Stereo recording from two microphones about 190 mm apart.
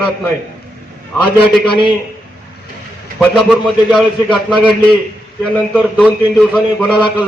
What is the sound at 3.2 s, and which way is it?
A man's voice, centre (ahead or behind).